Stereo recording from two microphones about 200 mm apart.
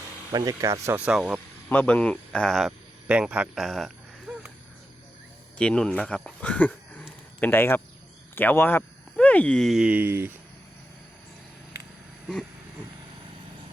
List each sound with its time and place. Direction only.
0.3 s speech: 15° right (ahead or behind)
1.7 s speech: 5° left (ahead or behind)
5.5 s speech: 5° left (ahead or behind); by 10.3 s 10° right (ahead or behind)